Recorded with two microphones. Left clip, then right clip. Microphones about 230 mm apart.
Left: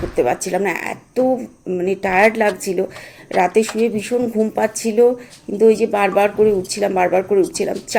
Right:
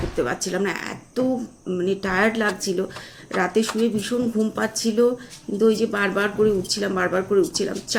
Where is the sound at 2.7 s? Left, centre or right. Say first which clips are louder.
Left 5 dB; left.